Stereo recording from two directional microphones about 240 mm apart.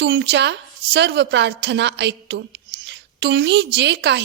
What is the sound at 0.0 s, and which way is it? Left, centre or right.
A woman's voice, right.